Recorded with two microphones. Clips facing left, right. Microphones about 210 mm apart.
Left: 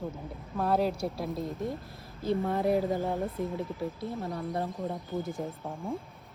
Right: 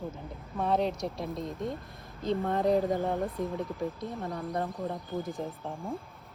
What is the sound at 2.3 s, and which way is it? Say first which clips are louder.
Speech: even; 15° left (ahead or behind).